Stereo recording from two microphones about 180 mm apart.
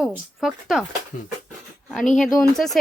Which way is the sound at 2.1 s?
5° left (ahead or behind).